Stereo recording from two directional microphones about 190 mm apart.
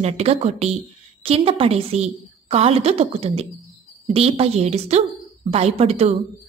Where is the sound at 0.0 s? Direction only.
35° right (ahead or behind).